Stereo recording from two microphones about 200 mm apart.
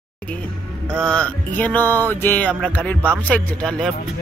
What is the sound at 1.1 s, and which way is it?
Music, 5° left (ahead or behind).